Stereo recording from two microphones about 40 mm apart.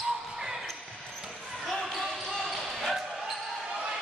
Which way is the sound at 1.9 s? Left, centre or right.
Centre.